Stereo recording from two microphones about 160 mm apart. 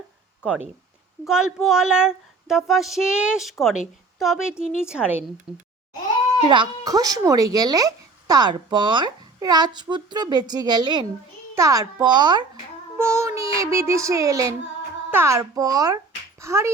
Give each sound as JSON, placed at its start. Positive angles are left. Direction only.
{"t": 0.4, "sound": "speech", "side_deg": -5}
{"t": 6.4, "sound": "speech", "side_deg": -30}
{"t": 13.0, "sound": "child singing", "side_deg": -20}
{"t": 13.6, "sound": "speech", "side_deg": -20}